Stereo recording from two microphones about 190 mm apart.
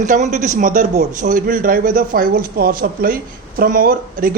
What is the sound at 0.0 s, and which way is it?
A man's voice, 40° right (ahead or behind).